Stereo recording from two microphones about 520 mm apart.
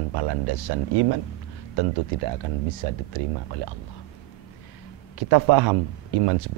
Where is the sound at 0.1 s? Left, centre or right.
Right.